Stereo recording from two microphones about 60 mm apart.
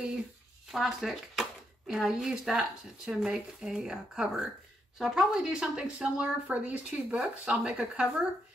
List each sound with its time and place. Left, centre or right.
0.7 s speech: centre